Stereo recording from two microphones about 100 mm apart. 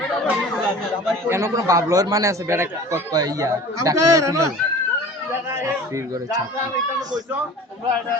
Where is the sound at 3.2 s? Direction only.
40° right (ahead or behind).